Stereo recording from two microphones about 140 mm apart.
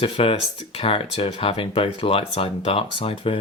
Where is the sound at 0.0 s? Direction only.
40° left (ahead or behind).